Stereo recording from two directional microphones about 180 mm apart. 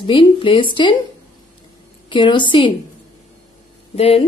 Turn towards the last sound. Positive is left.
turn(degrees=30)  # may be behind; listen again after turning